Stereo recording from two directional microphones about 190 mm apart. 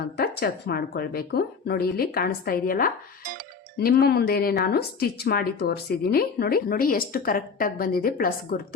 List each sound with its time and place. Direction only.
0.0 s a woman's voice: 55° left (ahead or behind)